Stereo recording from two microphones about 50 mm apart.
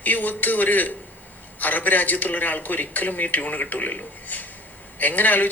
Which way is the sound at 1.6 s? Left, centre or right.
Left.